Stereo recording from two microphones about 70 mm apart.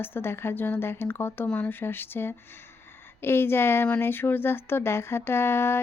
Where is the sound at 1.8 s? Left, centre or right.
Left.